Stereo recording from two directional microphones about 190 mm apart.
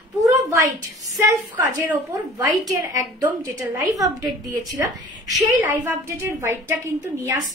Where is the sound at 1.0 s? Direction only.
20° right (ahead or behind).